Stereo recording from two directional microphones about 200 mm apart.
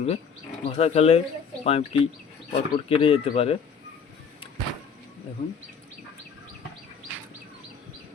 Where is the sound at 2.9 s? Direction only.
25° left (ahead or behind).